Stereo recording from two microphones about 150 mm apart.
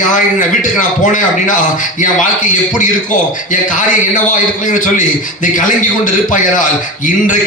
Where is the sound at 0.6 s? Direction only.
60° left (ahead or behind).